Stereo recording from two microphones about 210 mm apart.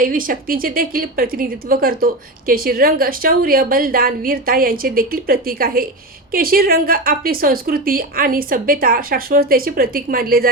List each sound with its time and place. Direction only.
0.0 s a woman's voice: 40° right (ahead or behind)